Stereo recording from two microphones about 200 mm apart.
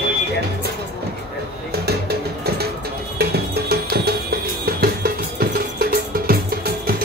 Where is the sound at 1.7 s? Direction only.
50° right (ahead or behind).